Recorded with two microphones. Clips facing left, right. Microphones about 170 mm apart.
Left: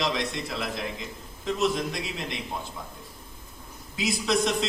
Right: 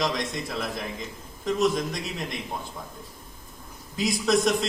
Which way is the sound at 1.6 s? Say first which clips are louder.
Right 1 dB; 45° right (ahead or behind).